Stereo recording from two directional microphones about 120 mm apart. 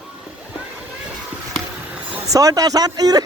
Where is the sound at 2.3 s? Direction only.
30° right (ahead or behind).